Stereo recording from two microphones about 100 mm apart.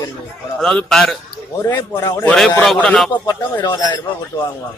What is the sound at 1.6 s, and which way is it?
Speech, 25° left (ahead or behind).